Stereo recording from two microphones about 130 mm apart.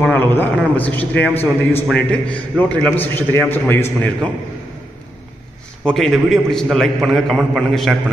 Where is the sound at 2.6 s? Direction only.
15° left (ahead or behind).